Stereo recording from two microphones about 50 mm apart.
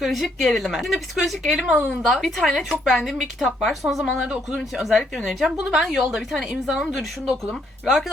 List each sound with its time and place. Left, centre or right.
0.0 s speech: centre
1.5 s a woman's voice: centre
1.9 s speech: centre